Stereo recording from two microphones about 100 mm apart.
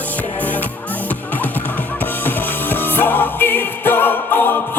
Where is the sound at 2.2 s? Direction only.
20° left (ahead or behind).